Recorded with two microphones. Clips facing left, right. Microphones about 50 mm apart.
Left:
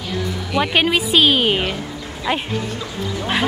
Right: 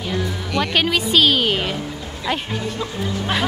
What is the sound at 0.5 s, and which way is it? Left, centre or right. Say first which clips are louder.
A woman's voice: left 2 dB; centre.